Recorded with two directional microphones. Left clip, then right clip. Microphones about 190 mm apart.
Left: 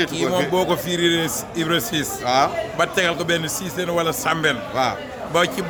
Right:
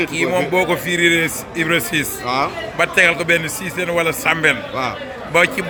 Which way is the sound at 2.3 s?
15° left (ahead or behind).